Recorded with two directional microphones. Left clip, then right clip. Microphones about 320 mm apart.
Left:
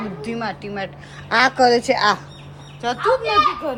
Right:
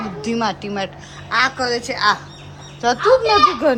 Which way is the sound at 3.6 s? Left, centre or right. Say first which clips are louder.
Right 9 dB; right.